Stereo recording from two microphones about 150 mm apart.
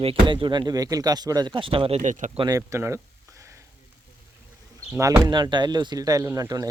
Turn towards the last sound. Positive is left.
turn(degrees=-25)  # may be behind; listen again after turning